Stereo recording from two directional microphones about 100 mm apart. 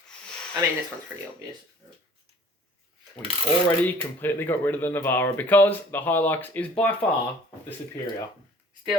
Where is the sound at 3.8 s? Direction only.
20° left (ahead or behind).